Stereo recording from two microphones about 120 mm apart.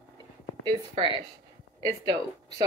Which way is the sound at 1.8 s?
35° right (ahead or behind).